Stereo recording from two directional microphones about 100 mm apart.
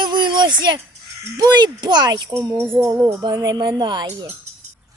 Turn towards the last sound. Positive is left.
turn(degrees=-50)  # may be behind; listen again after turning